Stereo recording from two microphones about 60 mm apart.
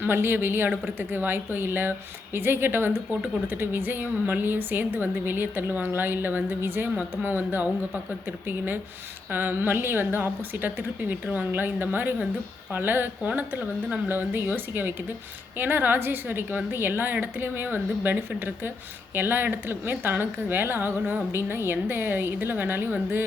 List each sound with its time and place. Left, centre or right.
0.0 s a woman's voice: right
11.1 s a woman's voice: right